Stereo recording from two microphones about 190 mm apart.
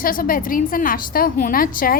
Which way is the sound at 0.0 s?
50° left (ahead or behind).